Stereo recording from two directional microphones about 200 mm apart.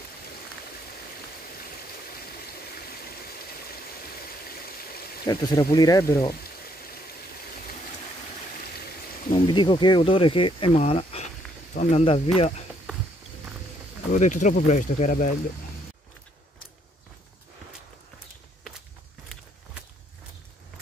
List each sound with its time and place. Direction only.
4.6 s a sound: 50° left (ahead or behind)
5.2 s speech: 20° left (ahead or behind)
9.3 s speech: 25° left (ahead or behind)
14.1 s speech: 40° left (ahead or behind)